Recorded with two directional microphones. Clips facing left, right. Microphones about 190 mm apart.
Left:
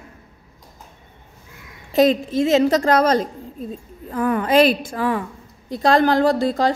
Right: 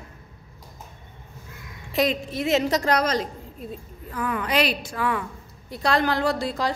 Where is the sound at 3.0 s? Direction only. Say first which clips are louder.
Left 7 dB; 50° left (ahead or behind).